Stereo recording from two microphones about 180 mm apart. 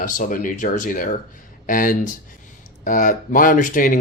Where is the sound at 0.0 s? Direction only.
50° left (ahead or behind).